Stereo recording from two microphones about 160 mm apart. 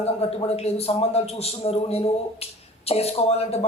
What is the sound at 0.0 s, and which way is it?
A man's voice, 40° left (ahead or behind).